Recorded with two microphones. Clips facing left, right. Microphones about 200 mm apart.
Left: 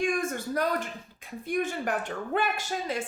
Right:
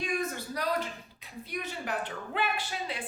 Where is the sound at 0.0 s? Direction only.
50° left (ahead or behind).